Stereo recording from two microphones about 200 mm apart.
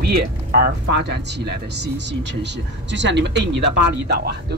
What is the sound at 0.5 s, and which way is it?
Speech, 55° right (ahead or behind).